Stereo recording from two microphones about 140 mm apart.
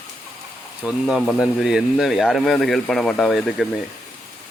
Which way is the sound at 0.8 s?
5° right (ahead or behind).